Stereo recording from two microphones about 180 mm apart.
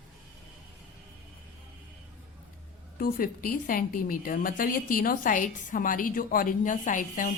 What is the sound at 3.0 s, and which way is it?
A woman's voice, 50° left (ahead or behind).